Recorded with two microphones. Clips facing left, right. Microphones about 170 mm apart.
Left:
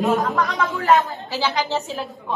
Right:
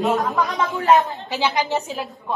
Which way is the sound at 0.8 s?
20° right (ahead or behind).